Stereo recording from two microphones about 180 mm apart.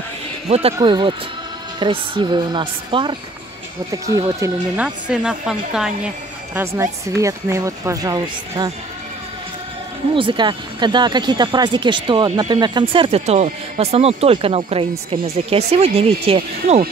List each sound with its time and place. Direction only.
0.5 s speech: 35° right (ahead or behind)
4.4 s speech: 5° right (ahead or behind)
10.1 s speech: 25° right (ahead or behind)